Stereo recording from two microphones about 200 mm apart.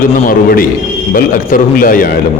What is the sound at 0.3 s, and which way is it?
A man's voice, 45° left (ahead or behind).